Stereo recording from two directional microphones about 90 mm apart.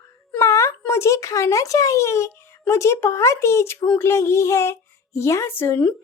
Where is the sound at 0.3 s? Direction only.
35° left (ahead or behind).